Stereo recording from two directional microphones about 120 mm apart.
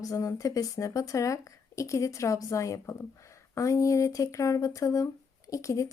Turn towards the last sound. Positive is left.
turn(degrees=25)  # may be behind; listen again after turning